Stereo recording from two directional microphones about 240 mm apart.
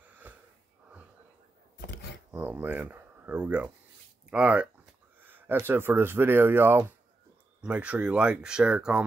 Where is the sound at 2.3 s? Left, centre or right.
Centre.